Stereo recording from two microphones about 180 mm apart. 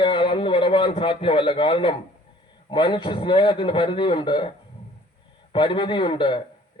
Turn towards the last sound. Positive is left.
turn(degrees=25)  # may be behind; listen again after turning